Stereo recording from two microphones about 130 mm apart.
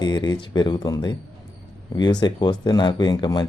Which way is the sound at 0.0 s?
30° left (ahead or behind).